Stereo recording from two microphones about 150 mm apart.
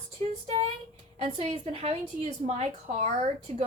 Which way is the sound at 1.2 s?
40° right (ahead or behind).